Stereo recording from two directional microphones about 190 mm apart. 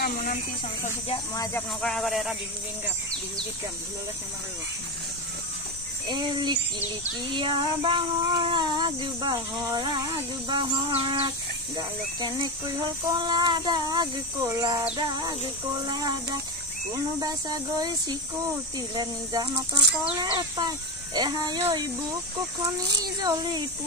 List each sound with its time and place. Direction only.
1.3 s speech: 15° left (ahead or behind)
1.8 s speech: centre (ahead or behind)
6.0 s speech: 25° right (ahead or behind)
22.9 s speech: 20° right (ahead or behind)